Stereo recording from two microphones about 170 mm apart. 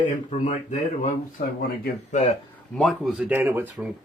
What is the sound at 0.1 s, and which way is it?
Speech, 40° left (ahead or behind).